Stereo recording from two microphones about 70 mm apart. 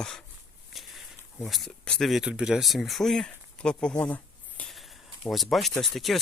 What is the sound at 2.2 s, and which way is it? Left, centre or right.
Speech, centre.